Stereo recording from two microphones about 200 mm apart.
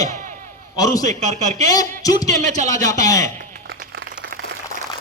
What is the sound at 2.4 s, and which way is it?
Speech, 35° right (ahead or behind).